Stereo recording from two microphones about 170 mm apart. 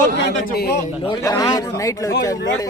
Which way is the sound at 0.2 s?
85° left.